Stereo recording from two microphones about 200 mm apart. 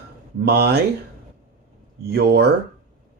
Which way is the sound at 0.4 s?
55° right (ahead or behind).